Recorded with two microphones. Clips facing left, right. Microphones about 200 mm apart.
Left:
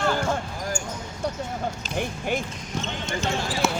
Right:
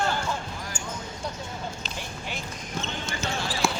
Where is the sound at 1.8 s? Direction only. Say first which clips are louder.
Left 9 dB; 50° left (ahead or behind).